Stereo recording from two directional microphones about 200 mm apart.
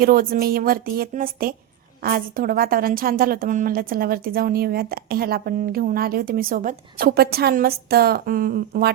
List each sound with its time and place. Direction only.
0.0 s a woman's voice: 45° right (ahead or behind)